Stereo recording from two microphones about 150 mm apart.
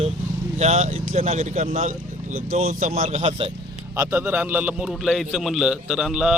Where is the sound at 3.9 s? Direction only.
15° right (ahead or behind).